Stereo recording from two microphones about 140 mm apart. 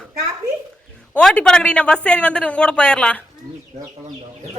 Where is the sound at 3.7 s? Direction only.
50° right (ahead or behind).